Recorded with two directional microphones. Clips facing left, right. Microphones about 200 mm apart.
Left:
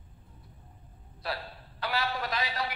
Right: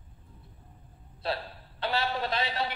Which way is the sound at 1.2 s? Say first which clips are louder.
Right 4 dB; 25° right (ahead or behind).